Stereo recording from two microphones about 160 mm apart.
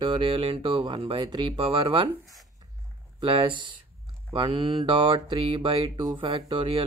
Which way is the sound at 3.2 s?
30° right (ahead or behind).